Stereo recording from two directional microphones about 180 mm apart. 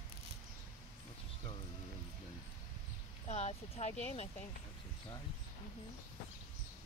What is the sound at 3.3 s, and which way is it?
Speech, 40° left (ahead or behind).